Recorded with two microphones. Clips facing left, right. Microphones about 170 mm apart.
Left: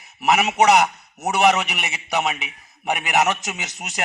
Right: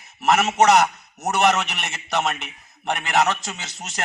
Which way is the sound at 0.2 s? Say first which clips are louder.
Even; 10° left (ahead or behind).